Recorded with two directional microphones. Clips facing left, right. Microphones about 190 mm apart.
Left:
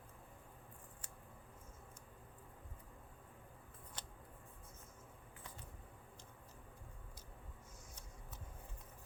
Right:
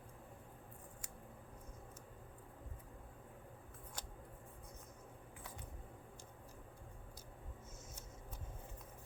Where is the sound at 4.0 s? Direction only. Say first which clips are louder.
Right 2 dB; 10° right (ahead or behind).